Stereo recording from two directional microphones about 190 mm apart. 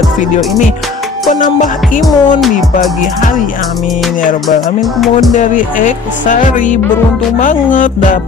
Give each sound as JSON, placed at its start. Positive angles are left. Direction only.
{"t": 1.3, "sound": "music", "side_deg": 40}
{"t": 2.0, "sound": "speech", "side_deg": 0}
{"t": 5.3, "sound": "music", "side_deg": 40}